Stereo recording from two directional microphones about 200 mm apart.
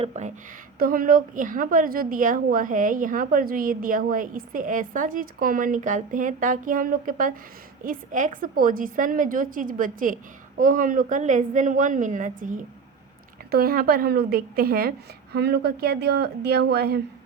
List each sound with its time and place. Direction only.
0.0 s a woman's voice: 35° right (ahead or behind); by 17.0 s 55° right (ahead or behind)